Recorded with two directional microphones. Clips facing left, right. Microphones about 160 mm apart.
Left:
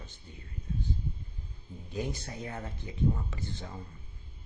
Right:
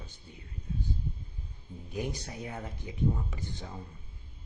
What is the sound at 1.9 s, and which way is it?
Speech, 15° right (ahead or behind).